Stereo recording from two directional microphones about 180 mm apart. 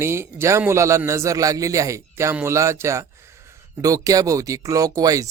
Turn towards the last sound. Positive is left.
turn(degrees=-20)  # may be behind; listen again after turning